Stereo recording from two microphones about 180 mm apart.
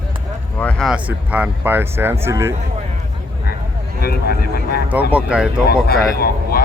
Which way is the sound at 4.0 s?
60° left (ahead or behind).